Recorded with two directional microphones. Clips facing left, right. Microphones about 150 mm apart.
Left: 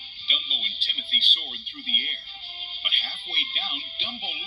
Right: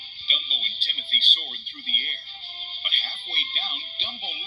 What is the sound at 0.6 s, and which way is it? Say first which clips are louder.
Speech: even; 40° right (ahead or behind).